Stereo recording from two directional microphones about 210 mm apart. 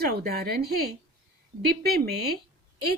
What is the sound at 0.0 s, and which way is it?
Speech, 45° right (ahead or behind).